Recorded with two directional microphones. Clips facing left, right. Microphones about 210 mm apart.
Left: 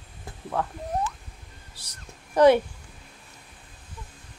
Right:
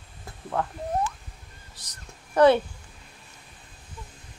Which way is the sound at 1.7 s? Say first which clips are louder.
Even; 10° left (ahead or behind).